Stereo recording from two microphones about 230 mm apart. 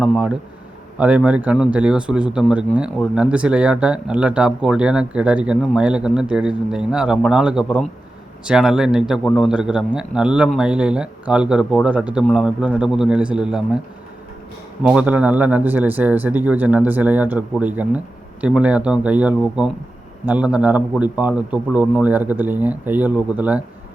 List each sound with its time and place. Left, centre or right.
0.0 s speech: centre
14.8 s a man's voice: centre